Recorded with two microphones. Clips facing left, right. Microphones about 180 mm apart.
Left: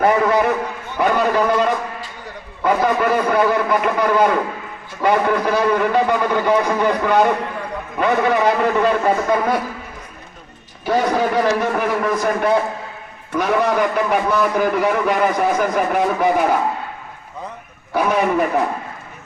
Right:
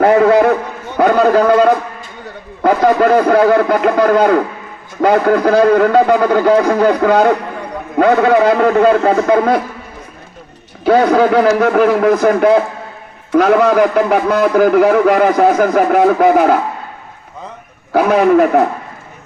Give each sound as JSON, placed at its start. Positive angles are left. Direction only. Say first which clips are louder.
{"t": 0.0, "sound": "a man's voice", "louder": "right 7 dB", "side_deg": -65}
{"t": 10.8, "sound": "a man's voice", "louder": "right 8 dB", "side_deg": -65}
{"t": 18.1, "sound": "a man's voice", "louder": "right 8 dB", "side_deg": -80}